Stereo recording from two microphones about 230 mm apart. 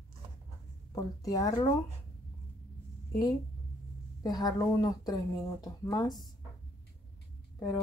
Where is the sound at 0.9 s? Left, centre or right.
Centre.